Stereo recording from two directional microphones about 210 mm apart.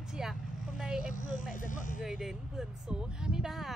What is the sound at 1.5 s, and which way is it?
Speech, 40° left (ahead or behind).